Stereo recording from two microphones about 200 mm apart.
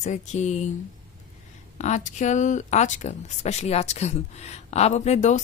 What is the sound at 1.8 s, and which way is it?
A woman's voice, 35° left (ahead or behind).